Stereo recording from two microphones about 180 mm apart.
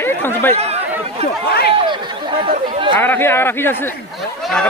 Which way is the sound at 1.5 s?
60° left (ahead or behind).